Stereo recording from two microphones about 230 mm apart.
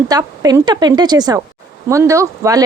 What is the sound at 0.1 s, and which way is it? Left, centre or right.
A woman's voice, centre.